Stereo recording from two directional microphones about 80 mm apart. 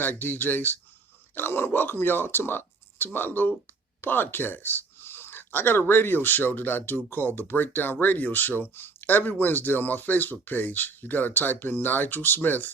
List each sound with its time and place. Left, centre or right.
0.0 s speech: left